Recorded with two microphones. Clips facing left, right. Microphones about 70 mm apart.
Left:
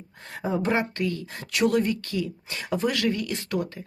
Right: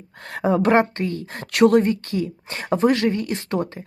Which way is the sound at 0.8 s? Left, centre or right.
Right.